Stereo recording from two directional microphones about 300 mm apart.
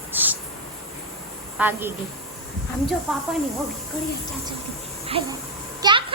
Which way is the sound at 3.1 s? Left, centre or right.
Centre.